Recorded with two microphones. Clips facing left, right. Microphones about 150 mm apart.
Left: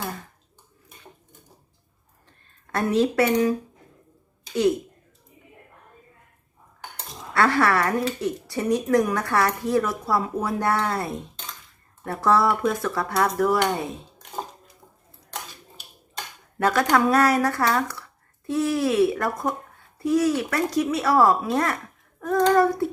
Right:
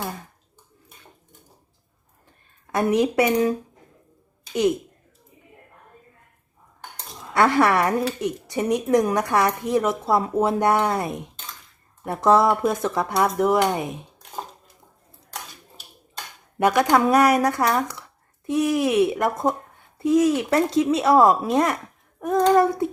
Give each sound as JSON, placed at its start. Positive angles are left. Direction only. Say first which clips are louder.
{"t": 2.7, "sound": "speech", "louder": "right 1 dB", "side_deg": -15}
{"t": 7.3, "sound": "a woman's voice", "louder": "right 2 dB", "side_deg": -20}
{"t": 16.6, "sound": "a woman's voice", "louder": "right 2 dB", "side_deg": -15}
{"t": 22.2, "sound": "child singing", "louder": "right 1 dB", "side_deg": -20}
{"t": 22.5, "sound": "a woman's voice", "louder": "right 1 dB", "side_deg": -20}